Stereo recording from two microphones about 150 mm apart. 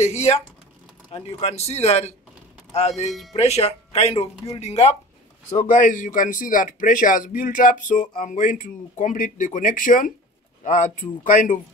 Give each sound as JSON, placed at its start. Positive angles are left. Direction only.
{"t": 0.0, "sound": "a man's voice", "side_deg": 45}
{"t": 3.3, "sound": "a man's voice", "side_deg": 45}
{"t": 5.5, "sound": "speech", "side_deg": 60}